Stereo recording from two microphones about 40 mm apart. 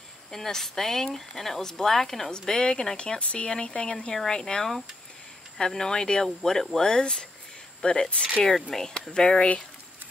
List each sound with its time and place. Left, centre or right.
0.3 s speech: centre
2.3 s speech: centre
3.0 s speech: left; by 6.8 s centre
6.8 s speech: centre
8.5 s speech: centre
9.1 s speech: left